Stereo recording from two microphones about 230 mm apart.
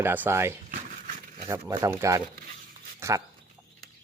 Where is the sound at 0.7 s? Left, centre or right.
Right.